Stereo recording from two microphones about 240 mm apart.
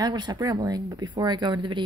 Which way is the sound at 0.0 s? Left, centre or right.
Centre.